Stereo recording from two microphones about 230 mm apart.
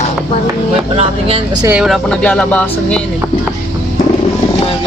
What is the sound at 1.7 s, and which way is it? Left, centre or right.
Speech, centre.